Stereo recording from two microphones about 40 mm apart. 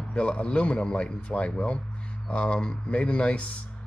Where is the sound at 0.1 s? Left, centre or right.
Left.